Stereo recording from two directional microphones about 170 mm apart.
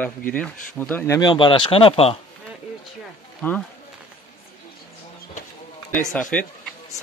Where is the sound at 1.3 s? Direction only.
30° left (ahead or behind).